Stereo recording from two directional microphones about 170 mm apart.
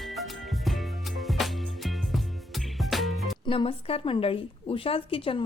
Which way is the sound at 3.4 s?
35° left (ahead or behind).